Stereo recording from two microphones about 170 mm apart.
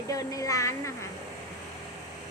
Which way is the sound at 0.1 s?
20° left (ahead or behind).